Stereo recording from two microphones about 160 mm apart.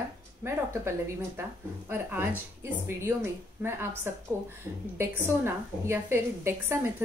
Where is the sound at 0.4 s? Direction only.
15° right (ahead or behind).